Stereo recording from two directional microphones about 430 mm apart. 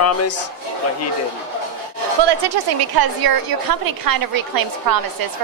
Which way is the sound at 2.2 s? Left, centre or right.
Right.